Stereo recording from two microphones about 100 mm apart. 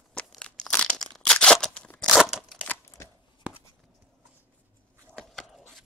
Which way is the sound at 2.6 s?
25° left (ahead or behind).